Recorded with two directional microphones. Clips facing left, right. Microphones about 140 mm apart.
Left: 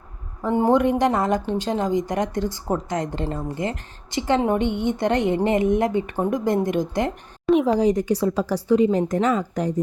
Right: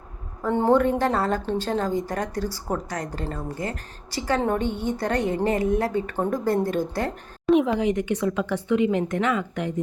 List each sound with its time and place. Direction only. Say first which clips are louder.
0.4 s a woman's voice: left 1 dB; 15° left (ahead or behind)
7.4 s a woman's voice: left 1 dB; centre (ahead or behind)
7.7 s speech: left 4 dB; 35° left (ahead or behind)